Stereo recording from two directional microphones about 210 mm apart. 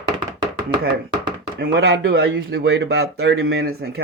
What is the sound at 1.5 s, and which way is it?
Speech, 50° right (ahead or behind).